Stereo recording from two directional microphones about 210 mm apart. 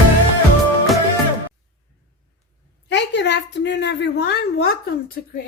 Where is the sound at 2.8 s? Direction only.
55° left (ahead or behind).